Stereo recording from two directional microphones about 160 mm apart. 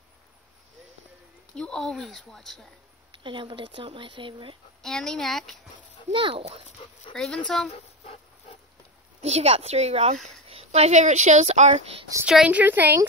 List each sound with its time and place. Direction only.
1.5 s a woman's voice: 5° left (ahead or behind)
3.3 s speech: 30° right (ahead or behind)
4.8 s a woman's voice: 5° left (ahead or behind)
6.0 s speech: 35° right (ahead or behind)
6.8 s speech: 35° left (ahead or behind)
7.4 s a woman's voice: 5° left (ahead or behind)
7.7 s dog: 45° left (ahead or behind)
9.2 s speech: 40° right (ahead or behind)
12.3 s speech: 5° right (ahead or behind)